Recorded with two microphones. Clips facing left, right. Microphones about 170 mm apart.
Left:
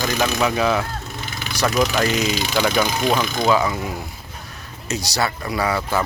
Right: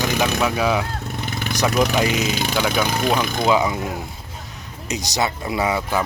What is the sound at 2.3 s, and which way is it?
Speech, 55° right (ahead or behind).